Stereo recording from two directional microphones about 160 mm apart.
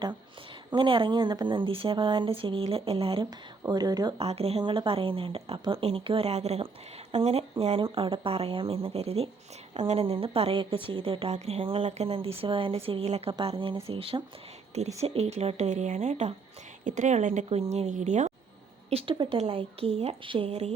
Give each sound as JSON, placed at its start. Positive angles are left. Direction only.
{"t": 0.7, "sound": "a woman's voice", "side_deg": -30}
{"t": 3.2, "sound": "speech", "side_deg": -25}
{"t": 4.2, "sound": "a woman's voice", "side_deg": -40}
{"t": 18.9, "sound": "a woman's voice", "side_deg": -35}